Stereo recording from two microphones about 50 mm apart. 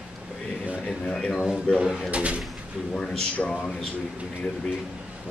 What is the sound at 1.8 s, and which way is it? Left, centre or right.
Speech, centre.